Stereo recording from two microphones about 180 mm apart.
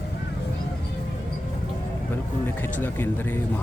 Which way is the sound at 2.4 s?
10° left (ahead or behind).